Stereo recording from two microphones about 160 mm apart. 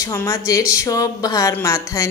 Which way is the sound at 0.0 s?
20° left (ahead or behind).